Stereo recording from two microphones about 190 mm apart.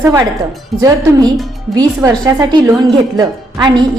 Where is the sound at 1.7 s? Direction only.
20° right (ahead or behind).